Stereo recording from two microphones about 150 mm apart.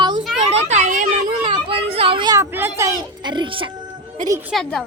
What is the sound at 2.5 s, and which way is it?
Speech, 15° right (ahead or behind).